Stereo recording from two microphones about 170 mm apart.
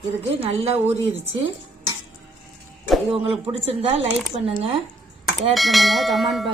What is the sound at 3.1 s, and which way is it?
Speech, 35° right (ahead or behind).